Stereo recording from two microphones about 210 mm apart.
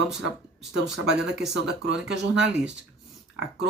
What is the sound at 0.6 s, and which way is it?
Speech, centre (ahead or behind).